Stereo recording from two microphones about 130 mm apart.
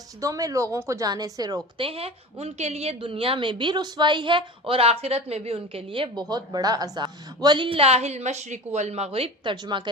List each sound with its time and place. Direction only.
0.2 s a woman's voice: 25° right (ahead or behind)
1.8 s a woman's voice: 50° right (ahead or behind)